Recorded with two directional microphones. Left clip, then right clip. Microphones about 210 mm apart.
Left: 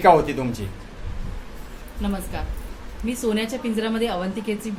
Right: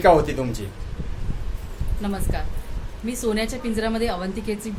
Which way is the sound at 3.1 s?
15° right (ahead or behind).